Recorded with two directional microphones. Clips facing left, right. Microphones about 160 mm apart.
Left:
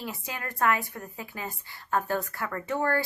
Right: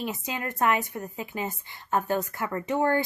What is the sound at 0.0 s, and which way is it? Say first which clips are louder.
A woman's voice: right 5 dB; 20° right (ahead or behind).